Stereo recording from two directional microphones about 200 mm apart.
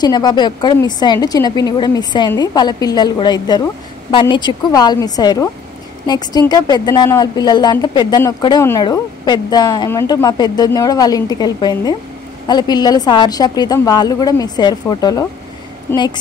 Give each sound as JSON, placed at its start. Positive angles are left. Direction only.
{"t": 0.0, "sound": "speech", "side_deg": 20}